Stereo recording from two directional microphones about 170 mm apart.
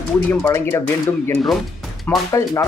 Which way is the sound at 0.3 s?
15° left (ahead or behind).